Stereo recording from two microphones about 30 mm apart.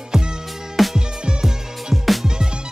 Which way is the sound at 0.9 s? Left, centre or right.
Right.